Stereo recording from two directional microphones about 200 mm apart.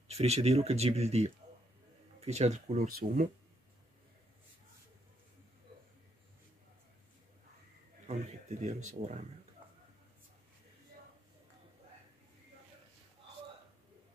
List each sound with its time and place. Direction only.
0.1 s speech: 30° right (ahead or behind)
8.5 s speech: 35° right (ahead or behind)